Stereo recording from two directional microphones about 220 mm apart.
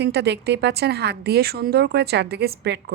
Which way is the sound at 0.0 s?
50° right (ahead or behind).